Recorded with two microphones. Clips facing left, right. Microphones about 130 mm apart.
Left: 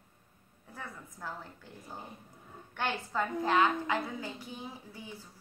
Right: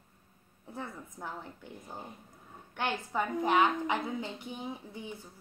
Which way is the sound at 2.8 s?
15° right (ahead or behind).